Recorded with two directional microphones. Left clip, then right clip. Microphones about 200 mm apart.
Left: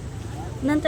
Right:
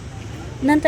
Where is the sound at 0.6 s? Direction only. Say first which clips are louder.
Right 6 dB; 20° right (ahead or behind).